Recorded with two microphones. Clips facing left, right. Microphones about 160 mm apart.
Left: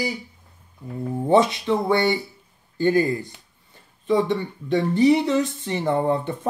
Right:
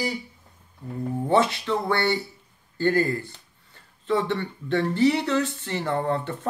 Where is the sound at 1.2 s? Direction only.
15° left (ahead or behind).